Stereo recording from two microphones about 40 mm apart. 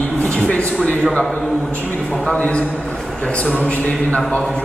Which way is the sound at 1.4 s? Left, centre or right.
Centre.